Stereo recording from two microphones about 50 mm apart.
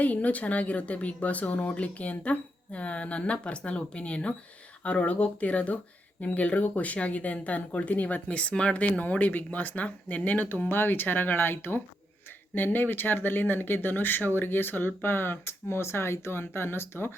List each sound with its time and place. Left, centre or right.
0.0 s speech: left
10.7 s speech: left